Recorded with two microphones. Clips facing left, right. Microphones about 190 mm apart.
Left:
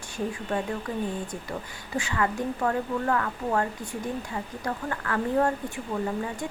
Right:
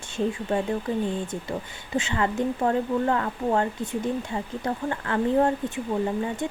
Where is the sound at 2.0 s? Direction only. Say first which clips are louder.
Right 3 dB; 25° right (ahead or behind).